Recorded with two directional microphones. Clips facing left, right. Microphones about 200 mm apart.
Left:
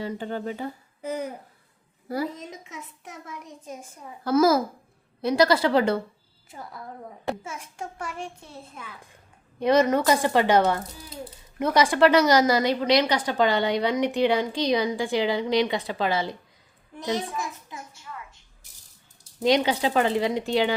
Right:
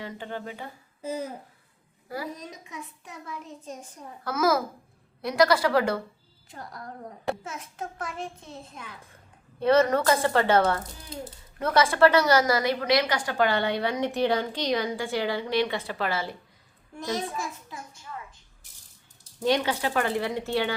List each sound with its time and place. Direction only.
0.0 s speech: 40° left (ahead or behind)
1.0 s a woman's voice: 15° left (ahead or behind)
2.3 s a child's voice: 25° left (ahead or behind)
4.2 s a child's voice: 30° left (ahead or behind)
6.5 s a woman's voice: 5° left (ahead or behind)
19.4 s a woman's voice: 20° left (ahead or behind)